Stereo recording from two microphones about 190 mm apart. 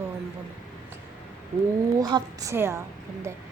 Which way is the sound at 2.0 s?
20° right (ahead or behind).